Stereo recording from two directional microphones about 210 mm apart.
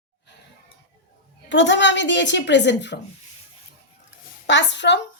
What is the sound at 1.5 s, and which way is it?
A woman's voice, 60° left (ahead or behind).